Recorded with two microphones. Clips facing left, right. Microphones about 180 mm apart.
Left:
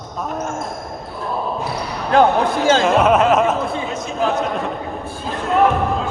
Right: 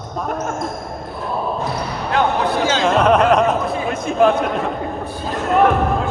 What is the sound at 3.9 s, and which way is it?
Speech, 55° right (ahead or behind).